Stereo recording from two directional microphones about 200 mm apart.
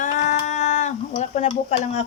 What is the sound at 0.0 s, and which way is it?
Cat, 35° left (ahead or behind).